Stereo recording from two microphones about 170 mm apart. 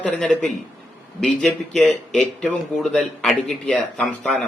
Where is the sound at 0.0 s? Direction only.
5° left (ahead or behind).